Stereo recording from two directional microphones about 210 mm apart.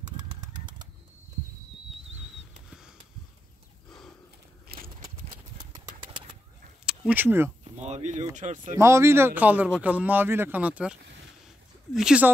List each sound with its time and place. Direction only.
4.7 s a sound: 45° right (ahead or behind)
5.0 s horse: 20° right (ahead or behind)
6.9 s speech: 5° right (ahead or behind)
7.8 s speech: 35° right (ahead or behind)
8.7 s speech: 15° right (ahead or behind)